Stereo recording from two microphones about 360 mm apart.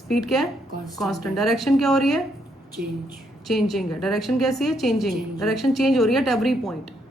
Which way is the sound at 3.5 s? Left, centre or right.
Centre.